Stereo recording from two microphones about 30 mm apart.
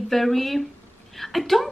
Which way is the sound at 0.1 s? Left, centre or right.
Centre.